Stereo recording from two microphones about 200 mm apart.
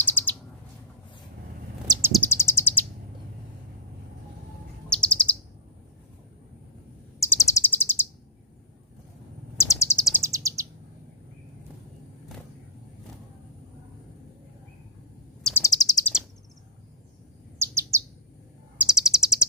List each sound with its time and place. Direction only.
0.0 s bird: 10° left (ahead or behind)
1.9 s bird: 10° right (ahead or behind)
2.1 s a sound: 10° left (ahead or behind)
4.9 s bird: 5° left (ahead or behind)
7.3 s bird: 15° left (ahead or behind)
9.6 s bird: 15° left (ahead or behind)
10.0 s bird: 15° right (ahead or behind)
15.4 s bird: 15° left (ahead or behind)
17.6 s bird: 15° right (ahead or behind)